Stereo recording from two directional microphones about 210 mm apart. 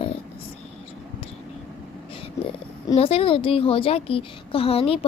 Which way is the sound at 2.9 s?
25° left (ahead or behind).